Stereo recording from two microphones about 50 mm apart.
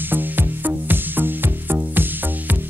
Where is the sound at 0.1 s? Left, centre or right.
Right.